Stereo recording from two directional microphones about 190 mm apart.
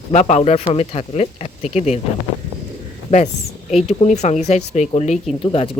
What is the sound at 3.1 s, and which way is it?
Speech, 30° left (ahead or behind).